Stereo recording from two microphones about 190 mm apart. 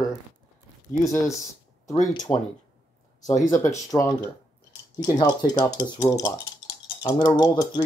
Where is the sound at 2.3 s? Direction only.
10° left (ahead or behind).